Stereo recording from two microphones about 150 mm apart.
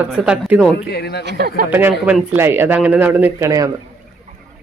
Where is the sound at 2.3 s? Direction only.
15° right (ahead or behind).